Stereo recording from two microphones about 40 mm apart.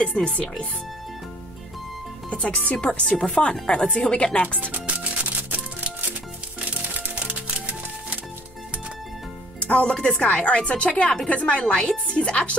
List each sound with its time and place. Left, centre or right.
0.0 s speech: left
2.2 s speech: left
4.7 s music: right
6.6 s music: right
9.6 s speech: left